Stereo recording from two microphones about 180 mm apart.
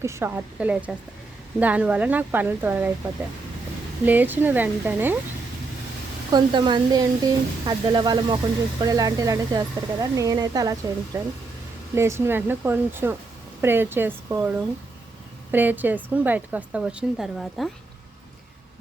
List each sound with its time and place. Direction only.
0.0 s a woman's voice: 15° right (ahead or behind)
4.0 s a woman's voice: 10° right (ahead or behind)
6.3 s a woman's voice: 25° right (ahead or behind)
15.5 s a woman's voice: 10° right (ahead or behind)